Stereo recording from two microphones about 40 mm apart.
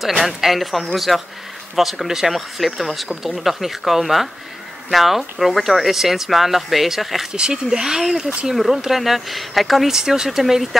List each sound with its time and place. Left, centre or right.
0.2 s speech: centre
7.3 s speech: centre
9.9 s speech: centre